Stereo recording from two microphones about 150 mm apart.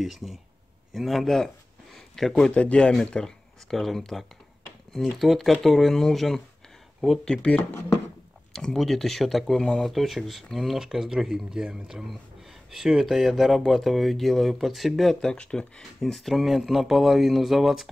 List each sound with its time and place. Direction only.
0.0 s speech: centre (ahead or behind)